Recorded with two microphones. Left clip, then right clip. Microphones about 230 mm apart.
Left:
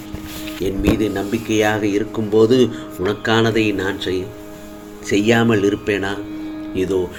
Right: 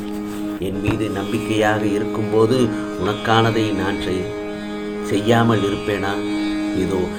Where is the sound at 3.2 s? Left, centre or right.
Left.